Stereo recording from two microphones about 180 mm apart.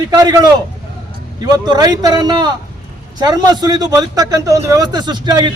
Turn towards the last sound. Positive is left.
turn(degrees=-25)  # may be behind; listen again after turning